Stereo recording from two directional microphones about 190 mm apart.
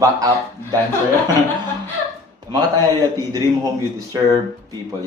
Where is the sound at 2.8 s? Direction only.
20° right (ahead or behind).